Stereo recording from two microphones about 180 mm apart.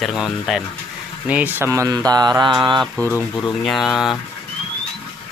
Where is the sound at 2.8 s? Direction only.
5° left (ahead or behind).